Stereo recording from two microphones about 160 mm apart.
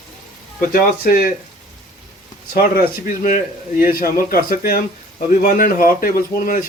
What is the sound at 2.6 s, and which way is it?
Speech, 65° left (ahead or behind).